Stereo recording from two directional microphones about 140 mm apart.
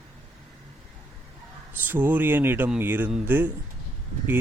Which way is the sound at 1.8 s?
15° right (ahead or behind).